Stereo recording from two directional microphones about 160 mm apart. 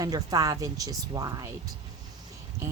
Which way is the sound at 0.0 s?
25° right (ahead or behind).